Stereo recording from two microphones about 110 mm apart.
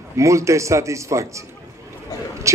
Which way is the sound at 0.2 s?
25° right (ahead or behind).